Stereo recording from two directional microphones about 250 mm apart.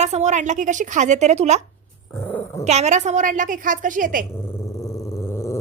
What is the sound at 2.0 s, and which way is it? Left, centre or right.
Dog, centre.